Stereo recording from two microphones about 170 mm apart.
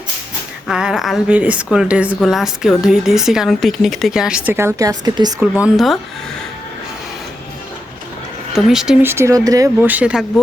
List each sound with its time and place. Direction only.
0.7 s speech: 5° right (ahead or behind); by 5.3 s 25° right (ahead or behind)
5.6 s speech: centre (ahead or behind)
8.5 s speech: 5° right (ahead or behind)
9.0 s speech: 15° right (ahead or behind)
9.8 s speech: 10° right (ahead or behind)